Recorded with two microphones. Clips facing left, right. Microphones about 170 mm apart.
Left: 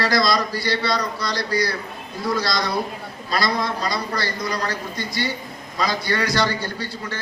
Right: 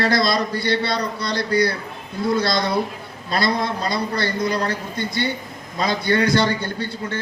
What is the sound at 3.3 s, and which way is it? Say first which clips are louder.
A man's voice: right 2 dB; 25° right (ahead or behind).